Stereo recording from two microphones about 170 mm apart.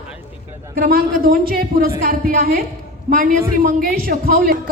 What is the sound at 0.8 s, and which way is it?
A woman's voice, 60° right (ahead or behind).